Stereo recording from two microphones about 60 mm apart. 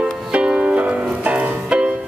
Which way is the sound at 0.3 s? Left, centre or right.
Centre.